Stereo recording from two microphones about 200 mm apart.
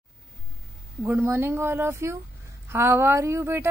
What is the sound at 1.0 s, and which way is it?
A woman's voice, 10° right (ahead or behind).